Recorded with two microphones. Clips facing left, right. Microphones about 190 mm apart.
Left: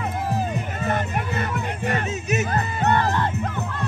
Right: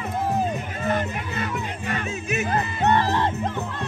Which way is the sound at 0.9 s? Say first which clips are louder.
Left 1 dB; 50° left (ahead or behind).